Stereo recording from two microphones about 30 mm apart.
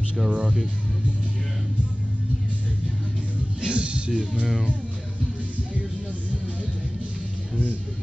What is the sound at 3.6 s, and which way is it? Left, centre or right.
Music, right.